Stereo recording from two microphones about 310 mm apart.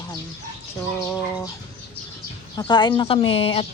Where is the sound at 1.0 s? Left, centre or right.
Centre.